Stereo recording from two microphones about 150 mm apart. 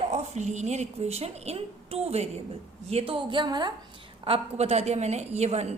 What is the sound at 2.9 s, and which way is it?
Speech, 40° right (ahead or behind).